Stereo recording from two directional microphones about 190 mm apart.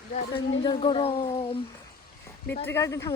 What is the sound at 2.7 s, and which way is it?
Speech, 15° left (ahead or behind).